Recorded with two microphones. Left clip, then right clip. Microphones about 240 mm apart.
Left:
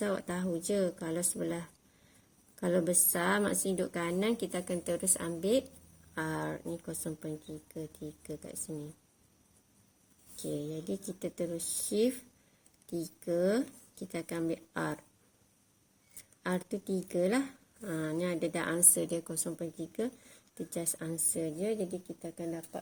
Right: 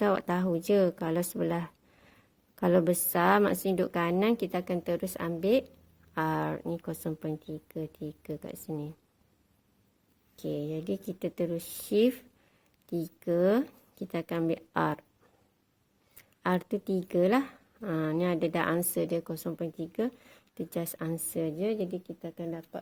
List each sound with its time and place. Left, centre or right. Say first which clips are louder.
0.0 s speech: right 7 dB; right
10.4 s speech: right 4 dB; right
16.4 s speech: right 6 dB; right